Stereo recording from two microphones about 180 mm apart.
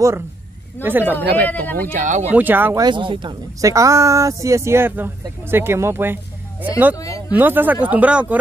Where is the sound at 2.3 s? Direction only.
10° right (ahead or behind).